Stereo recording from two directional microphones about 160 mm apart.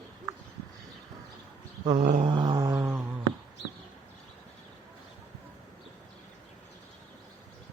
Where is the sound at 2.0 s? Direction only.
55° right (ahead or behind).